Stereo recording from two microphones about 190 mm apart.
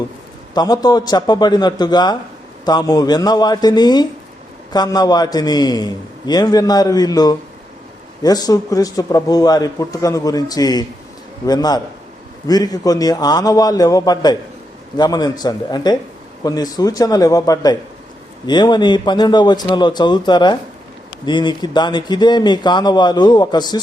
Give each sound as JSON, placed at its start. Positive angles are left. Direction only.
{"t": 0.5, "sound": "a man's voice", "side_deg": 20}